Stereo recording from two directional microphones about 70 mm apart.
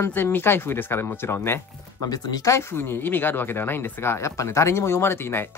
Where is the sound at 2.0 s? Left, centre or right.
Left.